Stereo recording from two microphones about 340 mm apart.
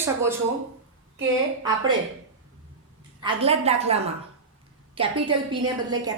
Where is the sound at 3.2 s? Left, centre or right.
Centre.